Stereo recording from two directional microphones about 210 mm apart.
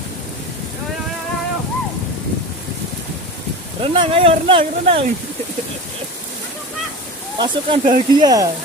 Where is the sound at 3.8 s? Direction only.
25° right (ahead or behind).